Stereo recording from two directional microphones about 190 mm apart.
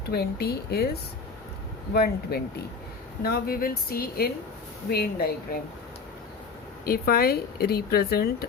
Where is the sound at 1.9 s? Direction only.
55° left (ahead or behind).